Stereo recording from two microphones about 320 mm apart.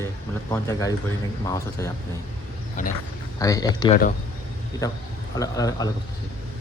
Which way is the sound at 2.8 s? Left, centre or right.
Left.